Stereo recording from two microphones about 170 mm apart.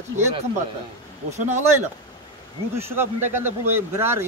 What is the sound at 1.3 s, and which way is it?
Speech, 45° right (ahead or behind).